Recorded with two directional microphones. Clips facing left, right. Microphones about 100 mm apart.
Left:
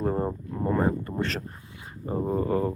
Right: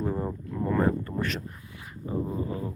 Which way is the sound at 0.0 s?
30° left (ahead or behind).